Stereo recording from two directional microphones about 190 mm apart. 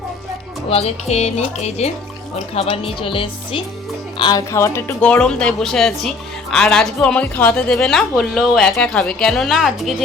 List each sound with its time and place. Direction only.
0.7 s speech: 30° left (ahead or behind); by 9.9 s centre (ahead or behind)